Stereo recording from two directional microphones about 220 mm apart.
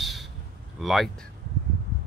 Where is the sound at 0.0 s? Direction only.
Centre (ahead or behind).